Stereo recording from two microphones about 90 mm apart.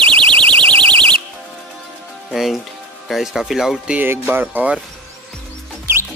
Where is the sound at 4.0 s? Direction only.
20° right (ahead or behind).